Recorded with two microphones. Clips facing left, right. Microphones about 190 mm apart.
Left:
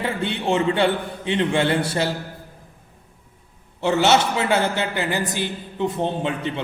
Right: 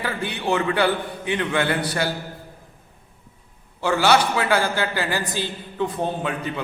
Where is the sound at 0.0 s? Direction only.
25° left (ahead or behind).